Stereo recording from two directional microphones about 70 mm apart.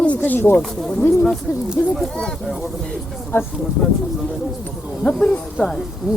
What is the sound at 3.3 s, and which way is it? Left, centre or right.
Speech, left.